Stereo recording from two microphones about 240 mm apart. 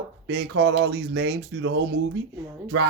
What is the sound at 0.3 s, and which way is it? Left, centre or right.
Speech, right.